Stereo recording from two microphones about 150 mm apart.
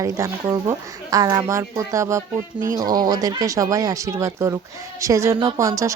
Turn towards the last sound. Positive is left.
turn(degrees=-20)  # may be behind; listen again after turning